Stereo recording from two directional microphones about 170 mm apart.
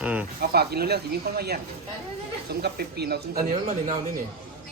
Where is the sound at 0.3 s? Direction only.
65° right (ahead or behind).